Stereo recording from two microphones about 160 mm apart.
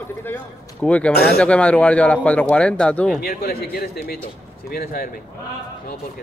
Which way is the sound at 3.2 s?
75° left (ahead or behind).